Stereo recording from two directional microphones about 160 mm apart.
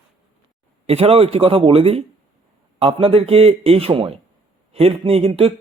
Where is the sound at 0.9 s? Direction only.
40° right (ahead or behind).